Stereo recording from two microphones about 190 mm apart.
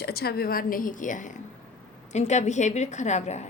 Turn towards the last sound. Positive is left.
turn(degrees=35)  # may be behind; listen again after turning